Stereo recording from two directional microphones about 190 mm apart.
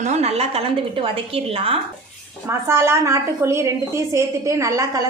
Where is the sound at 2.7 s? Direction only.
15° right (ahead or behind).